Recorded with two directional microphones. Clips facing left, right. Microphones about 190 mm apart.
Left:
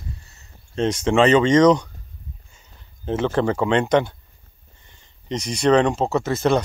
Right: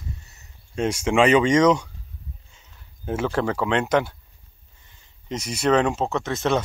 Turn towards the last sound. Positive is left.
turn(degrees=0)  # may be behind; listen again after turning